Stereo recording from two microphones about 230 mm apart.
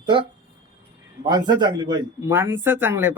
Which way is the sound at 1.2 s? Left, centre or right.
Centre.